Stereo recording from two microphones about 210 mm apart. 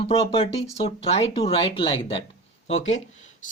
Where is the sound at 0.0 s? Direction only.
25° left (ahead or behind).